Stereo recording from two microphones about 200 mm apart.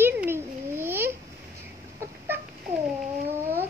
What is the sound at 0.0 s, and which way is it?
Babbling, 10° right (ahead or behind).